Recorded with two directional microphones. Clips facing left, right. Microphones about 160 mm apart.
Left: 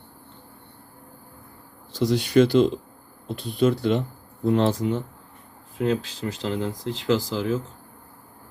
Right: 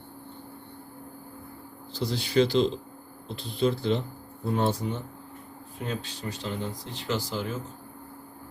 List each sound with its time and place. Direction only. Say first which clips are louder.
2.0 s speech: left 6 dB; 75° left (ahead or behind)
4.4 s speech: left 6 dB; 90° left